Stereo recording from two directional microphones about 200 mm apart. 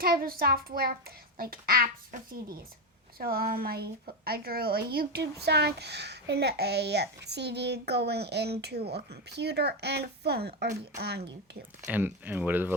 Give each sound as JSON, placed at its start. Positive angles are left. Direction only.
{"t": 0.0, "sound": "a child's voice", "side_deg": -50}
{"t": 11.8, "sound": "speech", "side_deg": -10}